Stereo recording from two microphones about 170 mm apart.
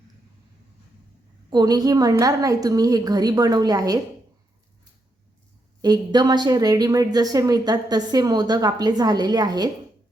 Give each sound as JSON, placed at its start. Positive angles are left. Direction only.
{"t": 1.5, "sound": "a woman's voice", "side_deg": -25}
{"t": 5.8, "sound": "a woman's voice", "side_deg": -25}